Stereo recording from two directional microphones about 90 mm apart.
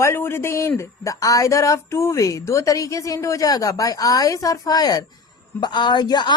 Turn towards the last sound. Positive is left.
turn(degrees=50)  # may be behind; listen again after turning